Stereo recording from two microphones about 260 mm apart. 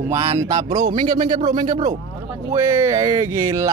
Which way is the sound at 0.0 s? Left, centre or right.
Centre.